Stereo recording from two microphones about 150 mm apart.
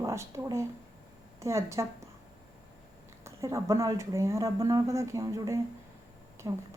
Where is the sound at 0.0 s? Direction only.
20° right (ahead or behind).